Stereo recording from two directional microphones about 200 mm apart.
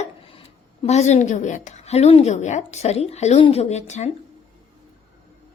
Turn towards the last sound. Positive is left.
turn(degrees=35)  # may be behind; listen again after turning